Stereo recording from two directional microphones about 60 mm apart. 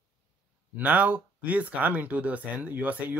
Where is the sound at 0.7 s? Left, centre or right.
Right.